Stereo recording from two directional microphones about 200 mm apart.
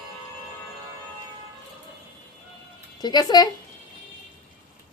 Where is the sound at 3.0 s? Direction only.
20° left (ahead or behind).